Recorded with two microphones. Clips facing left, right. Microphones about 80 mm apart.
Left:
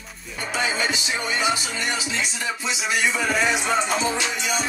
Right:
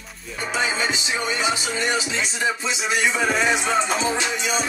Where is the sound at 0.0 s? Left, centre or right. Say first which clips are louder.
Right 2 dB; centre.